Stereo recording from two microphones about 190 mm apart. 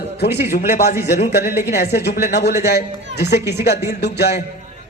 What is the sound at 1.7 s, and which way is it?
A man's voice, 60° left (ahead or behind).